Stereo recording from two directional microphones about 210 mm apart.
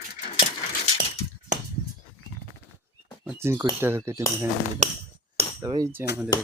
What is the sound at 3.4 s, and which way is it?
Speech, 10° right (ahead or behind).